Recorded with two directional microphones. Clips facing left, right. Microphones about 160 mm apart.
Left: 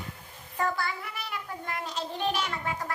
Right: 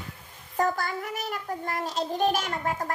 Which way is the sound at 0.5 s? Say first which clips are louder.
Right 4 dB; 40° right (ahead or behind).